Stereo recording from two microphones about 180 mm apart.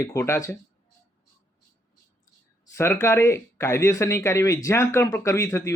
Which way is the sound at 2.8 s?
15° left (ahead or behind).